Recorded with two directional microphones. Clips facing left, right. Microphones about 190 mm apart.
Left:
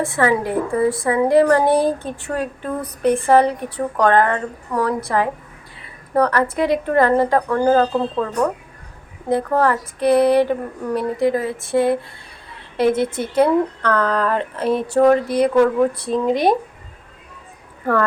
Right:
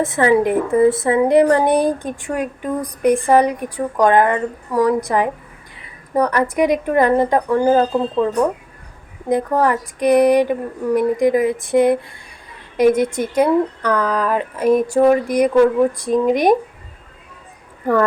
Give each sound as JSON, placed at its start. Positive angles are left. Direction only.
{"t": 0.0, "sound": "speech", "side_deg": -20}
{"t": 9.3, "sound": "speech", "side_deg": -15}